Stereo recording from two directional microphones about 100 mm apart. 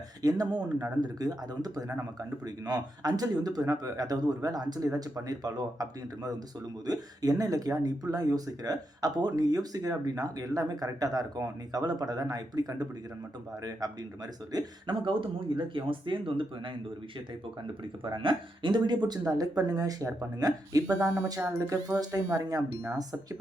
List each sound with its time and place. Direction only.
0.2 s speech: 40° right (ahead or behind)
14.5 s speech: 40° right (ahead or behind)
14.9 s speech: 60° right (ahead or behind)
18.0 s speech: 55° right (ahead or behind)
19.3 s speech: 40° right (ahead or behind)